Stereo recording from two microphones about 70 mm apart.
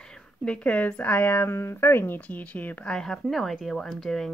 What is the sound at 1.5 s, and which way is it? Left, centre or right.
Speech, left.